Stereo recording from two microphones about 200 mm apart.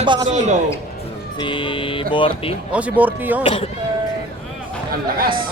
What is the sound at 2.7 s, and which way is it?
Speech, 10° right (ahead or behind).